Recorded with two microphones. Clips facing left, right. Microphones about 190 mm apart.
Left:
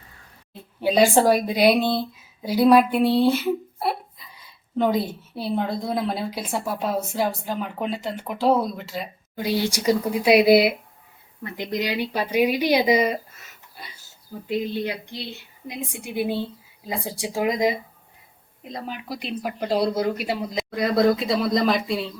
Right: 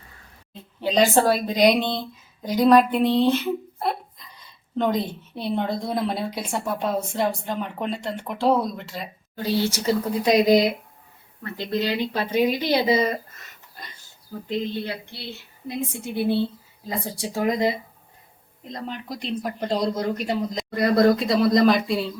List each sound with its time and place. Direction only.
0.8 s a woman's voice: 10° left (ahead or behind)
13.8 s oink: 10° left (ahead or behind)
14.4 s a woman's voice: 10° left (ahead or behind)